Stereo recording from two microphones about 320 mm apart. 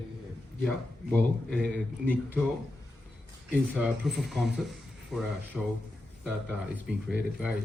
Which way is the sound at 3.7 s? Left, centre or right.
Centre.